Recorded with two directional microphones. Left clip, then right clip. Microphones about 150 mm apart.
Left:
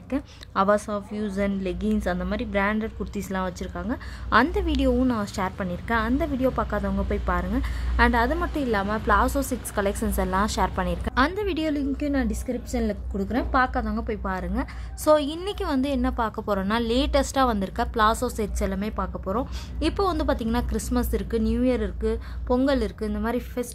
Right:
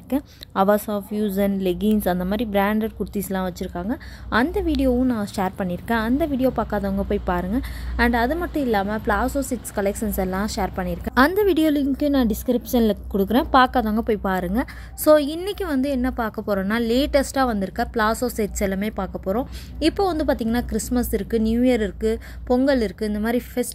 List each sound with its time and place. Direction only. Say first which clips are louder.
0.1 s a woman's voice: right 3 dB; 10° right (ahead or behind)
11.1 s a woman's voice: right 7 dB; 30° right (ahead or behind)
15.0 s a woman's voice: right 4 dB; 15° right (ahead or behind)